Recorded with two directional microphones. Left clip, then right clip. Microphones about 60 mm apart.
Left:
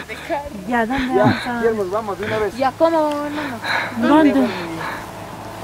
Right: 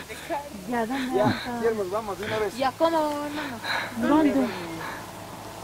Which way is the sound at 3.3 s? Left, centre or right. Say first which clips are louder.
Left 7 dB; centre.